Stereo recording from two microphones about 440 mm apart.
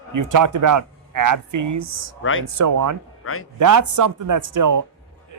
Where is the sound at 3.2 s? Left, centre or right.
Left.